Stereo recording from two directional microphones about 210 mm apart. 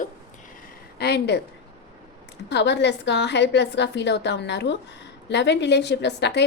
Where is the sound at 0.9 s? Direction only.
50° left (ahead or behind).